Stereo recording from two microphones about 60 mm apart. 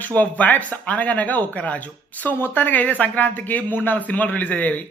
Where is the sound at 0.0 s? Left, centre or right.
Left.